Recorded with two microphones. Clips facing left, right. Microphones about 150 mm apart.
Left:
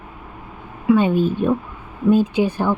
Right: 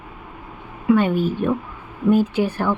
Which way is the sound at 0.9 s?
20° left (ahead or behind).